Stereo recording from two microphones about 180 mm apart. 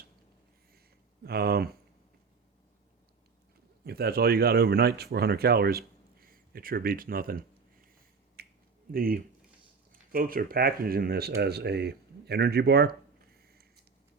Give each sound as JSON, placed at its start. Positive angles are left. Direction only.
{"t": 1.2, "sound": "speech", "side_deg": -60}
{"t": 3.8, "sound": "speech", "side_deg": -60}
{"t": 8.4, "sound": "finger snapping", "side_deg": -60}
{"t": 8.9, "sound": "speech", "side_deg": -55}
{"t": 13.4, "sound": "a sound", "side_deg": -60}